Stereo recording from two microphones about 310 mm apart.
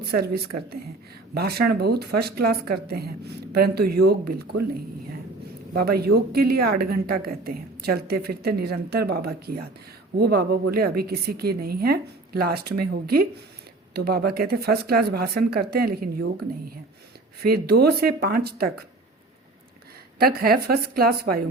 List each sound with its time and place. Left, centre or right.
0.0 s a woman's voice: right
5.7 s a woman's voice: right
17.4 s speech: right
20.1 s speech: right